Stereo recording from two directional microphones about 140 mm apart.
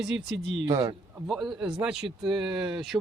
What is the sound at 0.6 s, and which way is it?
Speech, 30° right (ahead or behind).